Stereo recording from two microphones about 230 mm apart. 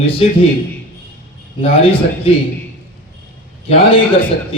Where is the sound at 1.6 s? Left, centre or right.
Left.